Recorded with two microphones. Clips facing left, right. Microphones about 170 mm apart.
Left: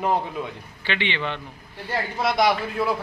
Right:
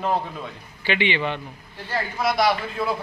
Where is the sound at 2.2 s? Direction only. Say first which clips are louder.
Even; 20° left (ahead or behind).